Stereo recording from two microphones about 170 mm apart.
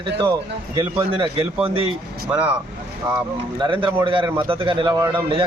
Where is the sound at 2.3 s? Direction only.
5° right (ahead or behind).